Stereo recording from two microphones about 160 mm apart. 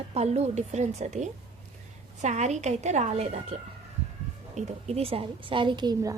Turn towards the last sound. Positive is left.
turn(degrees=-25)  # may be behind; listen again after turning